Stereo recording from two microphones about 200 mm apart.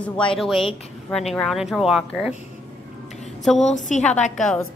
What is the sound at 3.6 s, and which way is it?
Speech, 35° left (ahead or behind).